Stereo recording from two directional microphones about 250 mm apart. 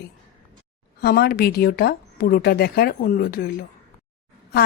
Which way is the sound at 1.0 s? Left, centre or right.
Left.